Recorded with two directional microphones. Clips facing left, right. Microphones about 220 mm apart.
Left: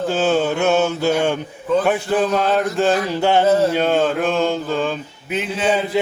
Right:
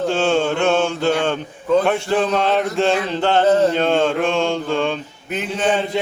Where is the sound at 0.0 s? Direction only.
5° left (ahead or behind).